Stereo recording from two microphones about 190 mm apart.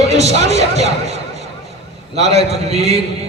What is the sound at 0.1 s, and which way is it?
Speech, 35° right (ahead or behind).